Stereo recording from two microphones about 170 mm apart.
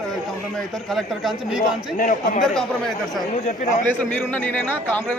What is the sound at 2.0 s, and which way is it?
Speech, 50° left (ahead or behind).